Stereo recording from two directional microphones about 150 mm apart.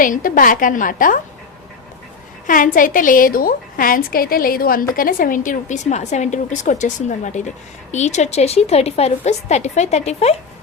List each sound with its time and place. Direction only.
0.0 s a woman's voice: 65° left (ahead or behind)
2.5 s a woman's voice: 65° left (ahead or behind); by 10.3 s 45° left (ahead or behind)